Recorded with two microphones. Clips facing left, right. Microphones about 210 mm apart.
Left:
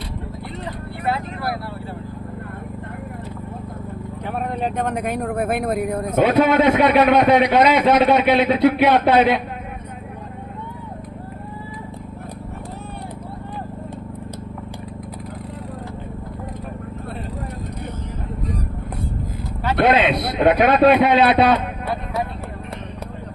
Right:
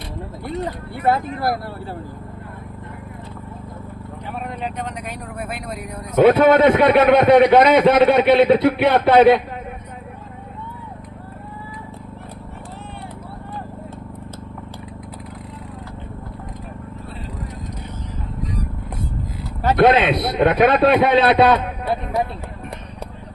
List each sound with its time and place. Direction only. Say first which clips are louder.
1.0 s speech: right 5 dB; 40° right (ahead or behind)
4.3 s speech: left 4 dB; 50° left (ahead or behind)
6.2 s a man's voice: right 4 dB; 55° right (ahead or behind)
19.6 s a man's voice: right 2 dB; 50° right (ahead or behind)